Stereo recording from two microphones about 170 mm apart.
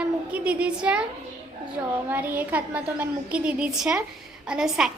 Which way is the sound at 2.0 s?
10° right (ahead or behind).